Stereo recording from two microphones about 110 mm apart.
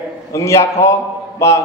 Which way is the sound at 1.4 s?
25° left (ahead or behind).